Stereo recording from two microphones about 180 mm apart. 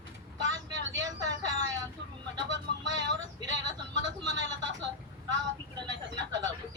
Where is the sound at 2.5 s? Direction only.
90° right.